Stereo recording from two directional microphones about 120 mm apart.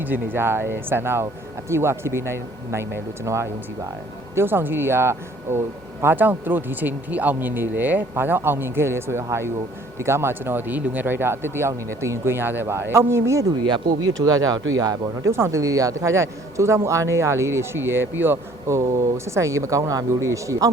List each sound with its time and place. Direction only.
0.0 s speech: 15° right (ahead or behind)
13.7 s speech: 35° right (ahead or behind)